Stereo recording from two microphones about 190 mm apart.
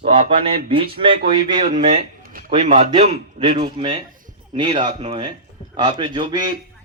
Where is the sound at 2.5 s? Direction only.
35° right (ahead or behind).